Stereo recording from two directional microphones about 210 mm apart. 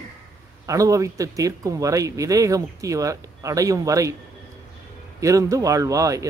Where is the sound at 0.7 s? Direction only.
15° right (ahead or behind).